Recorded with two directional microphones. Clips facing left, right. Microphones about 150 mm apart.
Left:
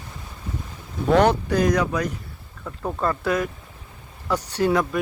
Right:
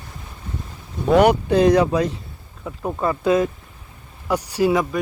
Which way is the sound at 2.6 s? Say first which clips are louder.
Right 2 dB; 5° right (ahead or behind).